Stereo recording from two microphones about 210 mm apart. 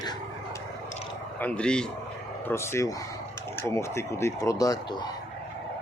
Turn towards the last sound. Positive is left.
turn(degrees=15)  # may be behind; listen again after turning